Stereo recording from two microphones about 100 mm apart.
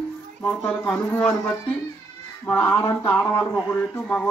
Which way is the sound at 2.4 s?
15° left (ahead or behind).